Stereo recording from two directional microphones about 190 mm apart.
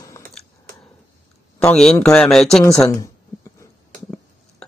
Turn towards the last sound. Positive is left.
turn(degrees=15)  # may be behind; listen again after turning